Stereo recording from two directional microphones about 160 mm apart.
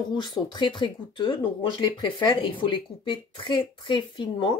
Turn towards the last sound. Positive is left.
turn(degrees=30)  # may be behind; listen again after turning